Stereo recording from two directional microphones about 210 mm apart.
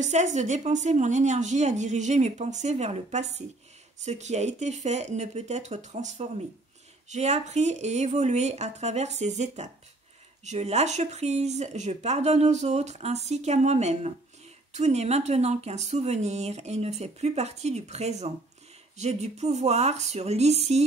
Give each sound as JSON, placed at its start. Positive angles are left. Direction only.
{"t": 0.0, "sound": "speech", "side_deg": -35}